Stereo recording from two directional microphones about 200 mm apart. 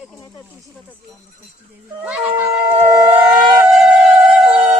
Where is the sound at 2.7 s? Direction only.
25° right (ahead or behind).